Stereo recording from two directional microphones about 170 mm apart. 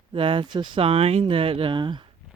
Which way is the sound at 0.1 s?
30° right (ahead or behind).